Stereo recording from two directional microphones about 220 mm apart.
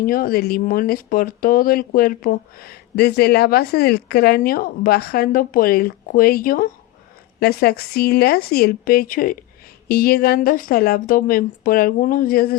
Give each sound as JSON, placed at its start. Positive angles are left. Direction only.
{"t": 0.0, "sound": "speech", "side_deg": 40}